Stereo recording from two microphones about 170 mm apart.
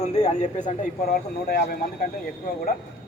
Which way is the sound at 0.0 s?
40° left (ahead or behind).